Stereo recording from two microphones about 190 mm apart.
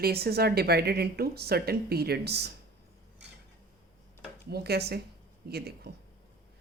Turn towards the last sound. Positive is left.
turn(degrees=-55)  # may be behind; listen again after turning